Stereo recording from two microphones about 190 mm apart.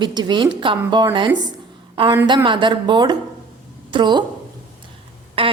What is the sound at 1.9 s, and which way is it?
A woman's voice, 25° right (ahead or behind).